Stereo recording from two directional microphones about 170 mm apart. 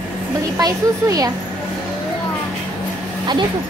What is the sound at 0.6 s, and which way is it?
Speech, 20° right (ahead or behind).